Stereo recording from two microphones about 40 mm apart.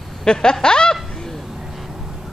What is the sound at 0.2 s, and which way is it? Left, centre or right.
Speech, centre.